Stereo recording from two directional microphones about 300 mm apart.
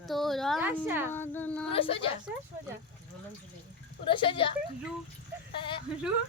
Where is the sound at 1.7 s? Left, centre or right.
Centre.